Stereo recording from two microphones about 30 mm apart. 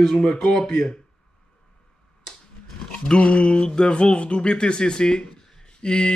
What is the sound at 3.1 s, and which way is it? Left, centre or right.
Speech, left.